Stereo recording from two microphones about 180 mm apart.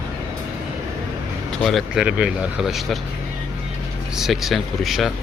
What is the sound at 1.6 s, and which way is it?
Speech, centre (ahead or behind).